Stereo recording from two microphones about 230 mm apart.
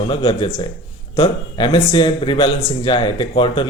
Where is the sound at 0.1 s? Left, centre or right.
Left.